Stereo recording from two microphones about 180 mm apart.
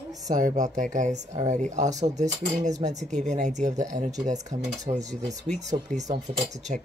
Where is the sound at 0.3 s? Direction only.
45° right (ahead or behind).